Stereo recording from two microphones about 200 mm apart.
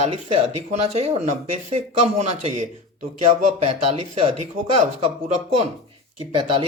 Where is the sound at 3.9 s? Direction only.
30° right (ahead or behind).